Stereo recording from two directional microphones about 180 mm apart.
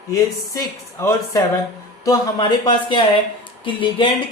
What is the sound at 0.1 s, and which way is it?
Speech, 20° left (ahead or behind).